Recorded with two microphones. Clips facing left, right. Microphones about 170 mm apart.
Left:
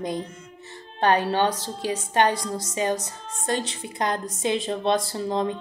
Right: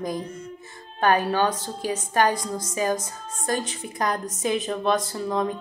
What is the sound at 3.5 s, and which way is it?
Speech, 25° left (ahead or behind).